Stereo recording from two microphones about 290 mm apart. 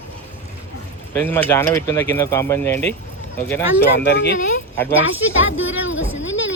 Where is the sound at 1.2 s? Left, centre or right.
Centre.